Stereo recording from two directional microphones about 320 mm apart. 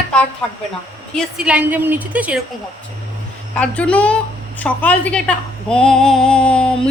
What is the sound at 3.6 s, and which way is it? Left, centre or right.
A woman's voice, centre.